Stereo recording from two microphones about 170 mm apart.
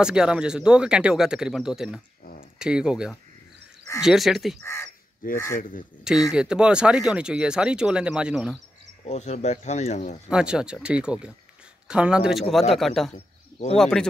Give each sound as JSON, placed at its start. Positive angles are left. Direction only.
{"t": 0.0, "sound": "speech", "side_deg": -5}
{"t": 5.2, "sound": "speech", "side_deg": 55}
{"t": 6.3, "sound": "speech", "side_deg": -5}
{"t": 9.0, "sound": "speech", "side_deg": 40}
{"t": 10.2, "sound": "speech", "side_deg": -5}
{"t": 13.1, "sound": "a sound", "side_deg": 35}
{"t": 13.7, "sound": "speech", "side_deg": 5}